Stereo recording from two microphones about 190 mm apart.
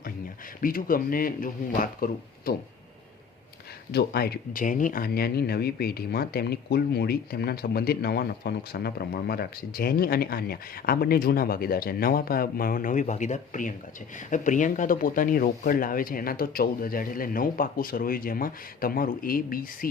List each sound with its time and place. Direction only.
0.6 s speech: 50° left (ahead or behind)
3.9 s speech: 55° left (ahead or behind)